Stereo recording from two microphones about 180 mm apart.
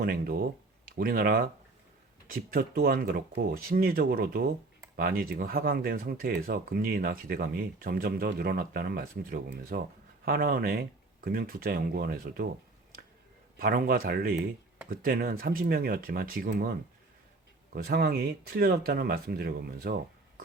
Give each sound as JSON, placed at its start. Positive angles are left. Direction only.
{"t": 0.0, "sound": "speech", "side_deg": -55}
{"t": 13.6, "sound": "speech", "side_deg": -55}
{"t": 17.7, "sound": "speech", "side_deg": -55}